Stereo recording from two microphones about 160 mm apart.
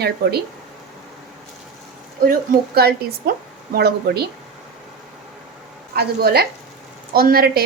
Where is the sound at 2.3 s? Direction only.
75° right (ahead or behind).